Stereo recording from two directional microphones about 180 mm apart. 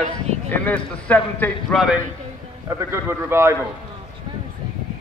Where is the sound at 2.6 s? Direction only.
15° right (ahead or behind).